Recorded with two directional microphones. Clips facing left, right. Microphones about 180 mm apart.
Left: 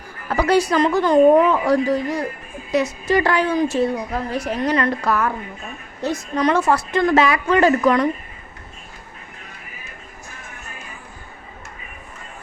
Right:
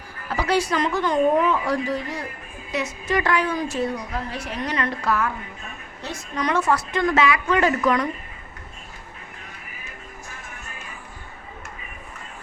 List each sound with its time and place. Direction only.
0.3 s a woman's voice: 45° left (ahead or behind); by 3.8 s 25° left (ahead or behind)
4.3 s a woman's voice: 40° left (ahead or behind)